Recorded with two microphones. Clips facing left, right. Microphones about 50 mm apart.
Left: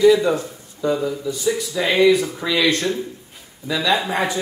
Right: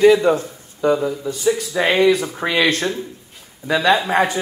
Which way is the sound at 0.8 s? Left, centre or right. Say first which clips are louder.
Right 3 dB; right.